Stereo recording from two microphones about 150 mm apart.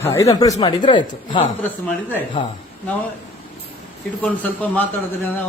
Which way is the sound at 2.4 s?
35° left (ahead or behind).